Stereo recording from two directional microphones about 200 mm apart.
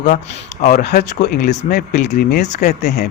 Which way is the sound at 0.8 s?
55° left (ahead or behind).